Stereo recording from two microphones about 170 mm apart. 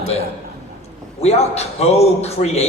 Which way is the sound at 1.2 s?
40° left (ahead or behind).